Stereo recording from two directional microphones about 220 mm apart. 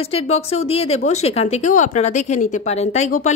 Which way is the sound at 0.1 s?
30° left (ahead or behind).